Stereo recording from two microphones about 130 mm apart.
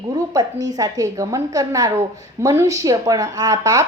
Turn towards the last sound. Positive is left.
turn(degrees=-30)  # may be behind; listen again after turning